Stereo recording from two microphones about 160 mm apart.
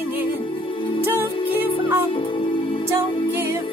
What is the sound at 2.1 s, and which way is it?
Music, 35° left (ahead or behind).